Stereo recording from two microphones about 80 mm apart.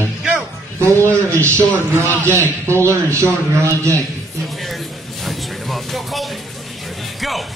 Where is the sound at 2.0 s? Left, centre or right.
Left.